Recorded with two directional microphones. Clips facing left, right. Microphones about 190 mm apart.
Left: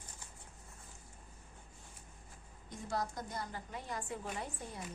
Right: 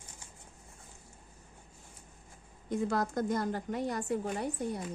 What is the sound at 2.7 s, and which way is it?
A woman's voice, 55° right (ahead or behind).